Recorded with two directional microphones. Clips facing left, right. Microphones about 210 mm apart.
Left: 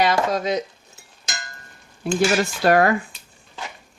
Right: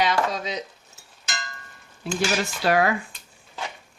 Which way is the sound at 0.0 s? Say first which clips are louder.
Left 4 dB; 50° left (ahead or behind).